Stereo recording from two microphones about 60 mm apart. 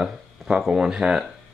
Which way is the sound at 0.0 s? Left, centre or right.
Centre.